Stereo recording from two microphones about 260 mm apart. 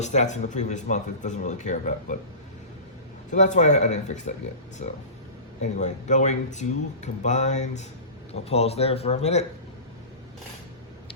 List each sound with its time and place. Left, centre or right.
0.0 s speech: left
3.3 s speech: left